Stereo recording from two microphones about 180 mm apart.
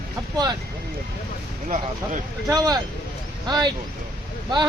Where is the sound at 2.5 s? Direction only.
20° right (ahead or behind).